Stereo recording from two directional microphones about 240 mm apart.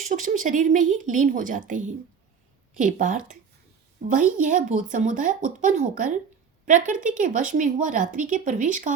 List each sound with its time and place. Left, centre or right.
0.0 s speech: right